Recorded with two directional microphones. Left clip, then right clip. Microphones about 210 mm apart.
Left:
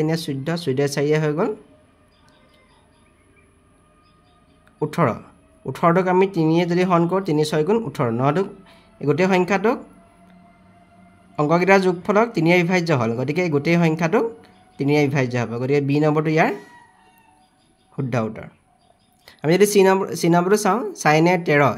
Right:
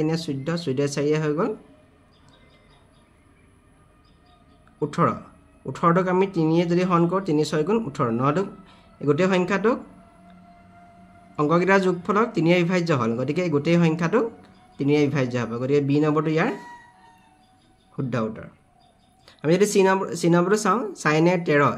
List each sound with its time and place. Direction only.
0.0 s speech: 30° left (ahead or behind)
4.7 s speech: 30° left (ahead or behind)
11.3 s speech: 25° left (ahead or behind)
17.9 s speech: 35° left (ahead or behind)